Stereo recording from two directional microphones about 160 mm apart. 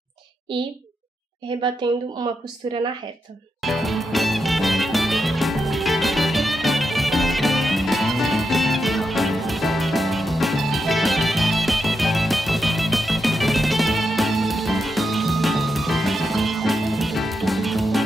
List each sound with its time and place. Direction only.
1.8 s speech: 30° right (ahead or behind)
3.6 s music: centre (ahead or behind)